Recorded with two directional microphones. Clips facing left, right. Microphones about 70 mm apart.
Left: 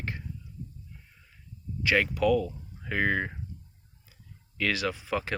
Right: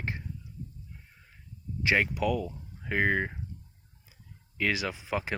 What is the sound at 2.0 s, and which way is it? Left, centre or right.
Speech, centre.